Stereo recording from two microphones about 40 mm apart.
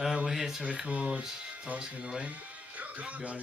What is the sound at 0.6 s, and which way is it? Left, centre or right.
Speech, right.